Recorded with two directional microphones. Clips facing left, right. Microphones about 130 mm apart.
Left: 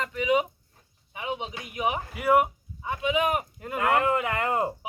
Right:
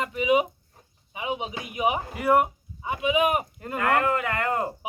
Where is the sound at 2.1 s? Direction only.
5° left (ahead or behind).